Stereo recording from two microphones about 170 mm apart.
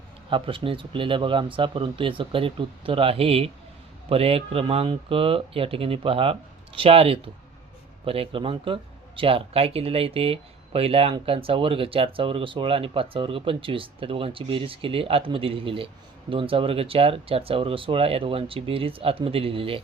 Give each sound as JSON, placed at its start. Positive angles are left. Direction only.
{"t": 0.3, "sound": "speech", "side_deg": -30}